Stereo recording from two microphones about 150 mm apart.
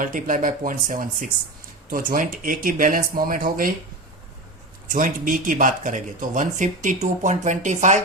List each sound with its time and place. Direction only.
0.0 s speech: 60° right (ahead or behind)
4.9 s speech: 65° right (ahead or behind)